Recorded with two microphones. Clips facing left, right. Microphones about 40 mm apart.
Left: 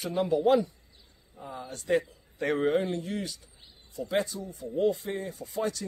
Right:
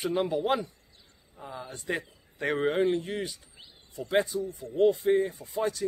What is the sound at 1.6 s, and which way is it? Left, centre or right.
Speech, right.